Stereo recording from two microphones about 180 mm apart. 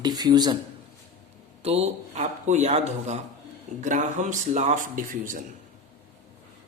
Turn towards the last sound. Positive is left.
turn(degrees=-50)  # may be behind; listen again after turning